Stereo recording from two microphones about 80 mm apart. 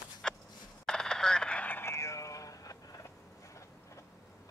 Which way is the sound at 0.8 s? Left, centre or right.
Centre.